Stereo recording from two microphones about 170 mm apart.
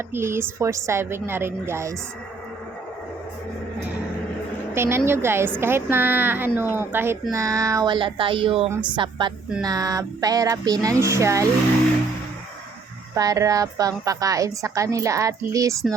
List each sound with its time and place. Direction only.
0.1 s a woman's voice: 15° right (ahead or behind)
4.7 s a woman's voice: 15° right (ahead or behind)
13.1 s a woman's voice: 20° right (ahead or behind)